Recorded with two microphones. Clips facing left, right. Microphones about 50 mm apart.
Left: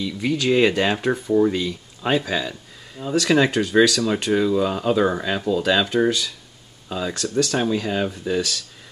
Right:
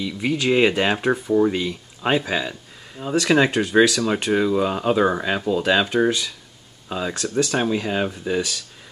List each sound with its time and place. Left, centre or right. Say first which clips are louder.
0.0 s speech: even; centre